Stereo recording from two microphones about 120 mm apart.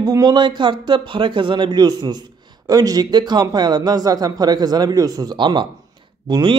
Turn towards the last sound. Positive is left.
turn(degrees=-35)  # may be behind; listen again after turning